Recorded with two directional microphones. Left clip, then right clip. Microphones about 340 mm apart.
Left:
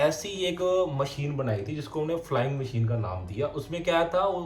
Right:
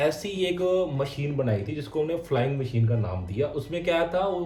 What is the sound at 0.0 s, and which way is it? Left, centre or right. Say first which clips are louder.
A man's voice: even; centre.